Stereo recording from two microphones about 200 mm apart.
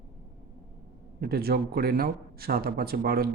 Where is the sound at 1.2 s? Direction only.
50° right (ahead or behind).